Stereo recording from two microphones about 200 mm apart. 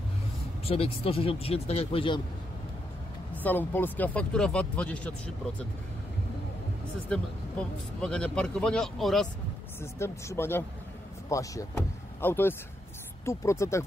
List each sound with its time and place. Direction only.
0.7 s speech: 30° left (ahead or behind)
3.4 s a man's voice: 10° left (ahead or behind)
7.1 s a man's voice: 5° left (ahead or behind)
9.8 s speech: 15° left (ahead or behind)